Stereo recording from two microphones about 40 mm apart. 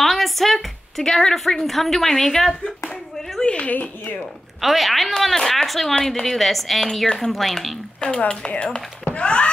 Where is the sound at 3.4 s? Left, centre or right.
Left.